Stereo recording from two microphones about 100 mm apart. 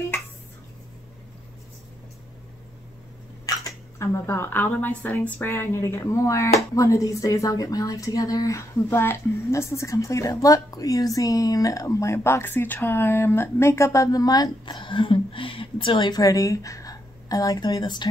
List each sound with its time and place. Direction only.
3.4 s speech: 35° left (ahead or behind); by 16.2 s 55° left (ahead or behind)
16.2 s a woman's voice: 35° left (ahead or behind)